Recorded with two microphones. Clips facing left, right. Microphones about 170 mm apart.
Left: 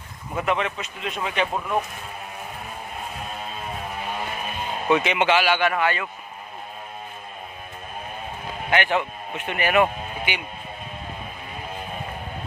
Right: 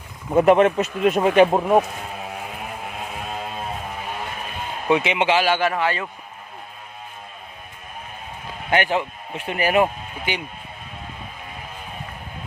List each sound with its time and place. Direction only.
0.3 s speech: 45° right (ahead or behind)
4.9 s speech: 25° right (ahead or behind)
8.7 s a man's voice: 35° right (ahead or behind)